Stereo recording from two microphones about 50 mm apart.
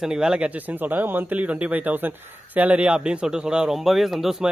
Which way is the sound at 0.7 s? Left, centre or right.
Right.